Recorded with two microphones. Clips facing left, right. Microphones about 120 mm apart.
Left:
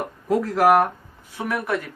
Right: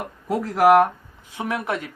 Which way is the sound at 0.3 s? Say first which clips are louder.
Right 1 dB; 15° right (ahead or behind).